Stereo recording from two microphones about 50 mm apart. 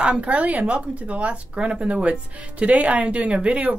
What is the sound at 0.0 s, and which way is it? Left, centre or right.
Speech, right.